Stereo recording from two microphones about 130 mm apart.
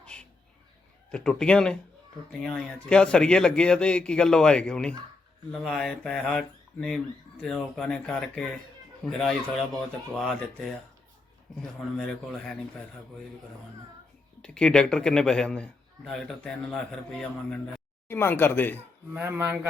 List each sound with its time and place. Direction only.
0.0 s bird: 10° left (ahead or behind)
1.1 s a man's voice: 5° left (ahead or behind)
11.9 s a man's voice: 5° left (ahead or behind)
14.4 s a man's voice: 5° left (ahead or behind)
18.1 s speech: 15° left (ahead or behind)
19.1 s speech: 15° right (ahead or behind)